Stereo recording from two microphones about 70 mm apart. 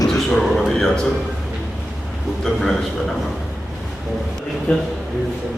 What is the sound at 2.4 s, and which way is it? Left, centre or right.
Speech, centre.